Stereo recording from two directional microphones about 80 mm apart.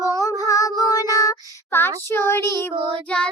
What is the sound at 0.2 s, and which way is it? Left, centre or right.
Child singing, left.